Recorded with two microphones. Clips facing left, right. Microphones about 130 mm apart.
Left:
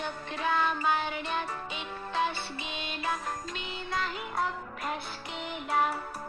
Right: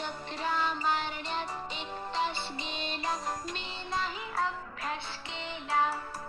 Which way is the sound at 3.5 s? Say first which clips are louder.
Left 2 dB; 30° right (ahead or behind).